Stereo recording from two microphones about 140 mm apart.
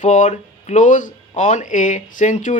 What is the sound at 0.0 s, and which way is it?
Speech, 60° left (ahead or behind).